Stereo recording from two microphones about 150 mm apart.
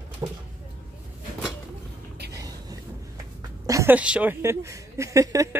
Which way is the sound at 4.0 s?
10° right (ahead or behind).